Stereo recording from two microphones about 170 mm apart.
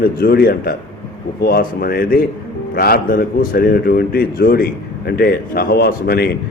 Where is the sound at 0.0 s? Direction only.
60° left (ahead or behind).